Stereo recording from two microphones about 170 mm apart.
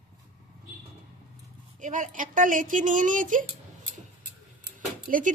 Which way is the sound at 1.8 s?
50° right (ahead or behind).